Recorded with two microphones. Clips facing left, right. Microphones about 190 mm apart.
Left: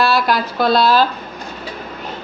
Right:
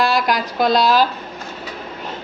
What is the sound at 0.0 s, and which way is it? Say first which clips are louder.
A woman's voice: left 2 dB; 15° right (ahead or behind).